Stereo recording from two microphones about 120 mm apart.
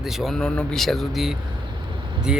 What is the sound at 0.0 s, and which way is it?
Speech, centre (ahead or behind).